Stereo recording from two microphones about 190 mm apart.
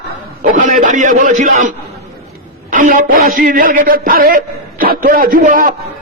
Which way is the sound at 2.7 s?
45° right (ahead or behind).